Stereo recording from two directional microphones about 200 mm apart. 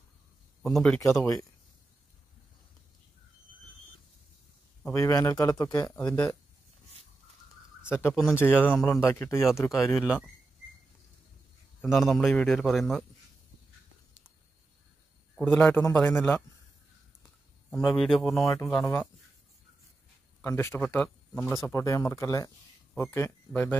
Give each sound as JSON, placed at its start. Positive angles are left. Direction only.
{"t": 0.6, "sound": "a man's voice", "side_deg": 0}
{"t": 4.8, "sound": "speech", "side_deg": 15}
{"t": 5.9, "sound": "speech", "side_deg": 5}
{"t": 7.9, "sound": "speech", "side_deg": 10}
{"t": 9.8, "sound": "speech", "side_deg": 0}
{"t": 11.8, "sound": "speech", "side_deg": 0}
{"t": 15.3, "sound": "speech", "side_deg": 5}
{"t": 17.6, "sound": "speech", "side_deg": 0}
{"t": 20.4, "sound": "speech", "side_deg": 10}